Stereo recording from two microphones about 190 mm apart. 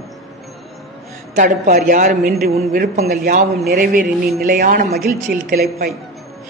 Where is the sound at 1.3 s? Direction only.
45° right (ahead or behind).